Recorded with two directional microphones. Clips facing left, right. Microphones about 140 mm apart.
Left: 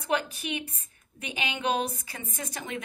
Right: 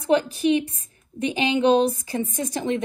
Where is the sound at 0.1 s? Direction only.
30° right (ahead or behind).